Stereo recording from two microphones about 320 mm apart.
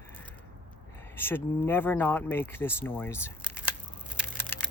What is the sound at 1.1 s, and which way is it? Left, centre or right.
Speech, centre.